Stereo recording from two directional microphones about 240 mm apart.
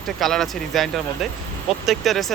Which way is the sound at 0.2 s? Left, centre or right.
Centre.